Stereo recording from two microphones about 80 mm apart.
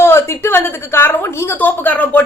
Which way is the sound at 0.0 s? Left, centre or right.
Left.